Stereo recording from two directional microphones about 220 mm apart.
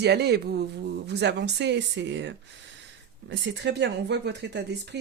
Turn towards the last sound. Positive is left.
turn(degrees=-50)  # may be behind; listen again after turning